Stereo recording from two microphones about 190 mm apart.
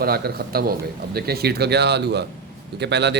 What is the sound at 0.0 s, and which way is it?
Speech, 55° right (ahead or behind).